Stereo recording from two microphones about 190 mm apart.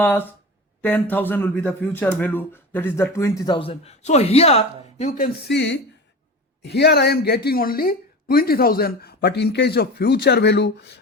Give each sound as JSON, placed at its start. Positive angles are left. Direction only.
{"t": 0.0, "sound": "speech", "side_deg": 10}
{"t": 5.5, "sound": "a woman's voice", "side_deg": 65}